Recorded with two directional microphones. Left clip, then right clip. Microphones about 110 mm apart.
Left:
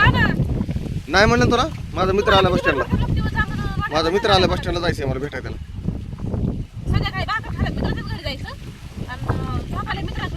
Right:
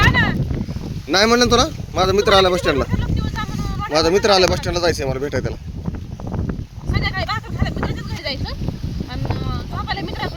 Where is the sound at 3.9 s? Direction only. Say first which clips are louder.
Right 3 dB; 45° right (ahead or behind).